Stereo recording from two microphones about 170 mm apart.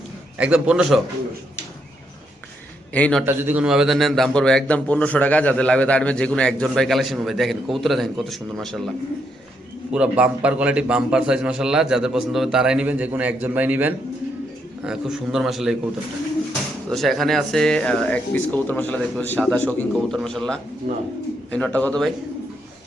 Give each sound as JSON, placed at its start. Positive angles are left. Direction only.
{"t": 0.3, "sound": "a man's voice", "side_deg": -5}
{"t": 2.9, "sound": "speech", "side_deg": 5}
{"t": 3.2, "sound": "a man's voice", "side_deg": -10}
{"t": 9.9, "sound": "a man's voice", "side_deg": -5}
{"t": 16.9, "sound": "a man's voice", "side_deg": 0}
{"t": 20.9, "sound": "a man's voice", "side_deg": -40}
{"t": 21.5, "sound": "speech", "side_deg": 5}